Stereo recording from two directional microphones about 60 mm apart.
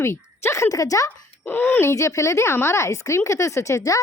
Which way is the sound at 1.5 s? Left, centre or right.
Left.